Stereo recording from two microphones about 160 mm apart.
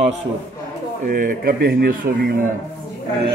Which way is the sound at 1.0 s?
65° right (ahead or behind).